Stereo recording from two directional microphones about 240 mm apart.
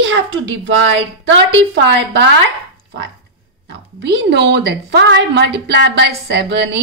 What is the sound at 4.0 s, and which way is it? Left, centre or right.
A woman's voice, right.